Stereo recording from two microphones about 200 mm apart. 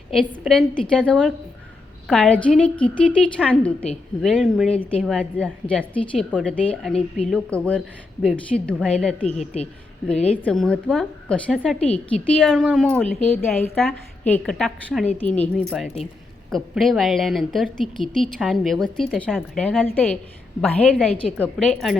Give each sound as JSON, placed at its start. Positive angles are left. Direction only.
{"t": 0.1, "sound": "a woman's voice", "side_deg": 0}
{"t": 9.2, "sound": "speech", "side_deg": 30}
{"t": 10.2, "sound": "a woman's voice", "side_deg": 5}